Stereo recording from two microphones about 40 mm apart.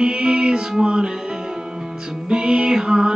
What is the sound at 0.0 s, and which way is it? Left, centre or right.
Music, centre.